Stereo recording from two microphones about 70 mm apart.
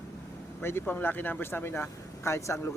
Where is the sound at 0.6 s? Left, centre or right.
Left.